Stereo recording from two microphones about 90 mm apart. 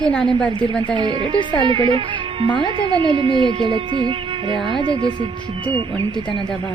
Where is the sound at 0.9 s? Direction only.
60° right (ahead or behind).